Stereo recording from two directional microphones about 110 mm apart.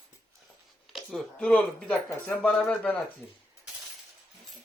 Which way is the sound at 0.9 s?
5° left (ahead or behind).